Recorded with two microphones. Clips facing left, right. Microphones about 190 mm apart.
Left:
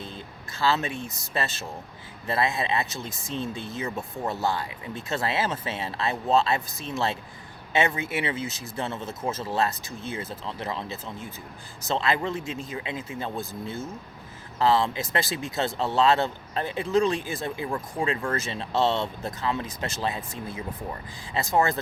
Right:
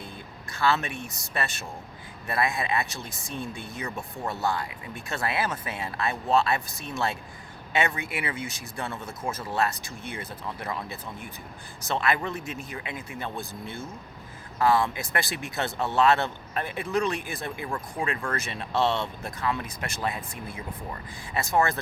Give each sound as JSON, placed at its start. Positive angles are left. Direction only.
{"t": 0.6, "sound": "speech", "side_deg": 20}
{"t": 11.9, "sound": "speech", "side_deg": 25}
{"t": 14.6, "sound": "speech", "side_deg": 25}
{"t": 21.3, "sound": "speech", "side_deg": 20}